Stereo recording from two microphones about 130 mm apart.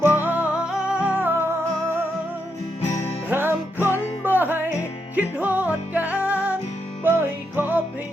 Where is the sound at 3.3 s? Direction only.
15° right (ahead or behind).